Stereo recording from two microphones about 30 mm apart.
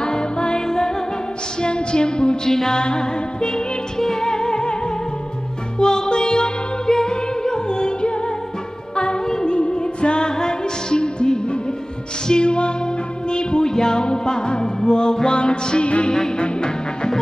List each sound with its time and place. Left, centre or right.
0.0 s music: left
1.6 s a sound: left
2.4 s music: centre
2.7 s music: left
5.8 s music: left